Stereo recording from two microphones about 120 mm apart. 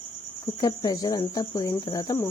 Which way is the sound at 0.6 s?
35° left (ahead or behind).